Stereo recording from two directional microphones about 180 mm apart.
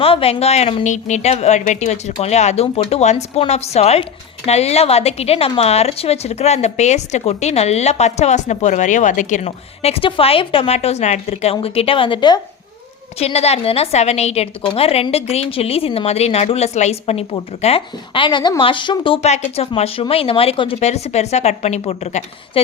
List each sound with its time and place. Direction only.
0.0 s a woman's voice: 30° left (ahead or behind)